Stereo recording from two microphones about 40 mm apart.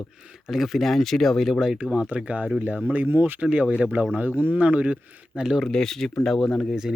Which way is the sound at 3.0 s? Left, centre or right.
Right.